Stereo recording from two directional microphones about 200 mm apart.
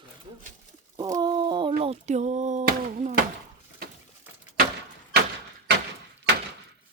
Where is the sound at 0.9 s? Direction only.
20° right (ahead or behind).